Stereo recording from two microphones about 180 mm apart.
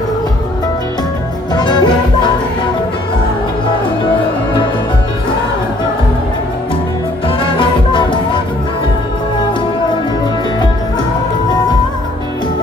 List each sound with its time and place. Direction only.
1.5 s music: 25° left (ahead or behind)
7.2 s music: 30° left (ahead or behind)